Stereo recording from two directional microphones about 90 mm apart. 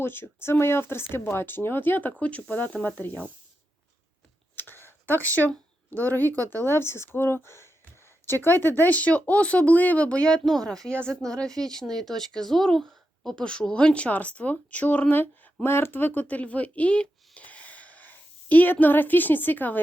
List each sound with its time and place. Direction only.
0.0 s speech: 25° left (ahead or behind)
4.5 s a sound: 25° left (ahead or behind)
5.9 s speech: 20° left (ahead or behind)